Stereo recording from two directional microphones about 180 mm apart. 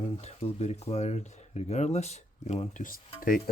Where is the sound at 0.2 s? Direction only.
35° left (ahead or behind).